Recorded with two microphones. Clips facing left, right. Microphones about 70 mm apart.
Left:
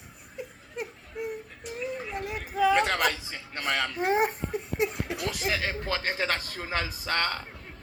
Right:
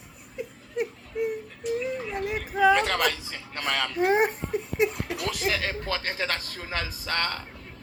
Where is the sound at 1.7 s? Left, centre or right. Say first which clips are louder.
Right 1 dB; left.